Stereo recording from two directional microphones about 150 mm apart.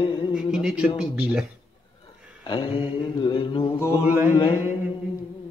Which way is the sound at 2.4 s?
35° left (ahead or behind).